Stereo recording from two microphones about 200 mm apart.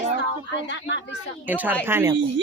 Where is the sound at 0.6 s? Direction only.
65° left (ahead or behind).